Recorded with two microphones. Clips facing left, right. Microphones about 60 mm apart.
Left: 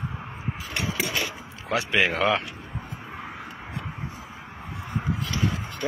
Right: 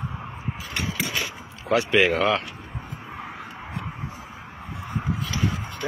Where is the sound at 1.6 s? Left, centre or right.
Centre.